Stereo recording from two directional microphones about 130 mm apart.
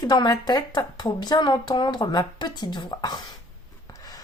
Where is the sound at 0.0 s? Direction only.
30° left (ahead or behind).